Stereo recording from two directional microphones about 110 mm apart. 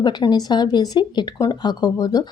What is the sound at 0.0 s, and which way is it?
Speech, 40° left (ahead or behind).